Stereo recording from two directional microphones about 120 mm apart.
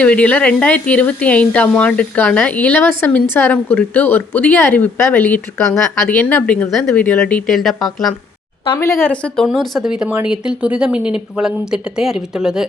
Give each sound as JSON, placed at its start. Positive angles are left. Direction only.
{"t": 0.0, "sound": "speech", "side_deg": 10}
{"t": 8.8, "sound": "speech", "side_deg": 25}
{"t": 9.0, "sound": "speech", "side_deg": 5}